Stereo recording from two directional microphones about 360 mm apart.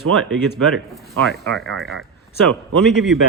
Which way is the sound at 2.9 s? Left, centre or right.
Centre.